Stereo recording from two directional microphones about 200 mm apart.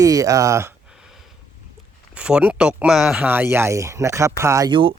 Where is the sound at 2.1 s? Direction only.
5° right (ahead or behind).